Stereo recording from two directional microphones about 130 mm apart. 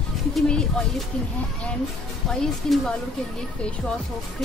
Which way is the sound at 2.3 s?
5° left (ahead or behind).